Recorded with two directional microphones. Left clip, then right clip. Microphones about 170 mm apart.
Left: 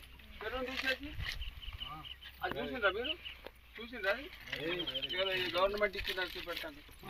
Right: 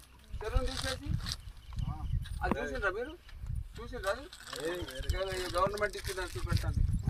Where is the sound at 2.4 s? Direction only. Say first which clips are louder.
Right 1 dB; 20° right (ahead or behind).